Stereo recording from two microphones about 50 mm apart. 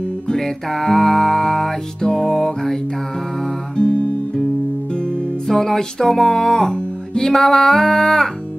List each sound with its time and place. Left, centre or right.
0.3 s music: centre
3.7 s music: left
5.5 s music: centre